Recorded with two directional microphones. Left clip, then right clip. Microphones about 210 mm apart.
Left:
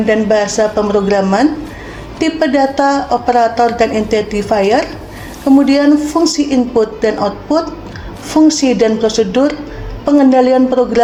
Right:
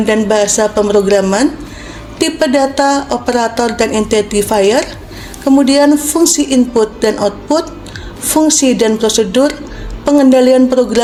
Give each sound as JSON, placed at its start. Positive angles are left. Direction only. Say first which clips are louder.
{"t": 0.0, "sound": "speech", "louder": "even", "side_deg": -40}